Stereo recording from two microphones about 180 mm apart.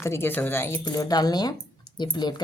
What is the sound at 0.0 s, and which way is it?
A woman's voice, 15° left (ahead or behind).